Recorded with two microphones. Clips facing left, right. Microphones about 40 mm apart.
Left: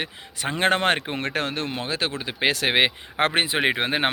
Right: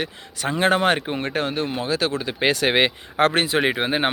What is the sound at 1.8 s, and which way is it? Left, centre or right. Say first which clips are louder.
Speech: right 4 dB; left.